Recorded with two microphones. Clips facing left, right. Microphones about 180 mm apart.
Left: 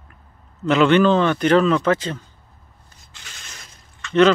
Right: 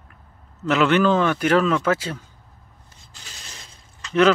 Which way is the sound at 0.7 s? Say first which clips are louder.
Left 3 dB; 5° right (ahead or behind).